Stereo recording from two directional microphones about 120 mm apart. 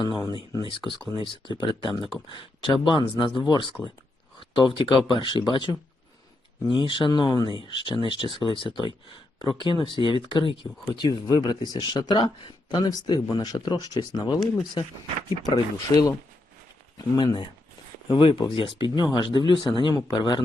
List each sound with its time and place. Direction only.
0.0 s speech: 35° left (ahead or behind)
15.4 s speech: 35° left (ahead or behind)
18.1 s speech: 45° left (ahead or behind)